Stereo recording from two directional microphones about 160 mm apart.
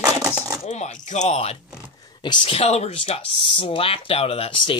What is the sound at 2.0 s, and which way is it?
Speech, 30° left (ahead or behind).